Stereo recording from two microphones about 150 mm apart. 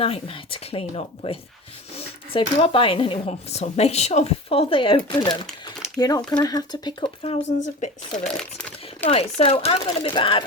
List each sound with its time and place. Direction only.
0.0 s speech: 40° left (ahead or behind)
5.3 s crumpling: centre (ahead or behind)
6.0 s speech: 25° left (ahead or behind)
8.4 s crumpling: 10° left (ahead or behind)
9.0 s speech: 40° left (ahead or behind)